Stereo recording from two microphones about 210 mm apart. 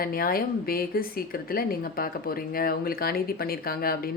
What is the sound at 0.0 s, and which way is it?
Speech, 45° left (ahead or behind).